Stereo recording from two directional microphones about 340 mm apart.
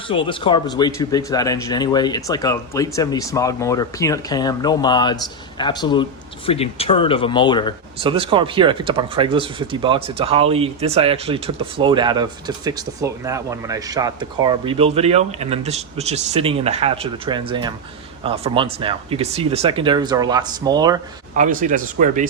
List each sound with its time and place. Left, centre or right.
0.1 s a man's voice: centre
8.0 s speech: centre
21.3 s speech: right